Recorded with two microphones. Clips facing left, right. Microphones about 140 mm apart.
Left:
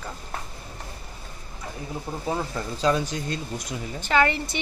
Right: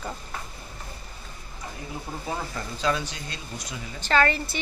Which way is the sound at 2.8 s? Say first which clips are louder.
Left 4 dB; 40° left (ahead or behind).